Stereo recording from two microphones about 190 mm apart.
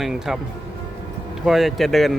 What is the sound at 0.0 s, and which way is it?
Speech, 5° right (ahead or behind).